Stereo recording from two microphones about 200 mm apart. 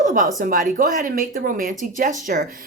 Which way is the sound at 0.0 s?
40° right (ahead or behind).